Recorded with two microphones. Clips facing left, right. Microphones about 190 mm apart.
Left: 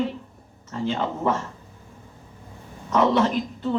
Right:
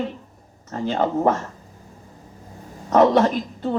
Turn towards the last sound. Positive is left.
turn(degrees=-45)  # may be behind; listen again after turning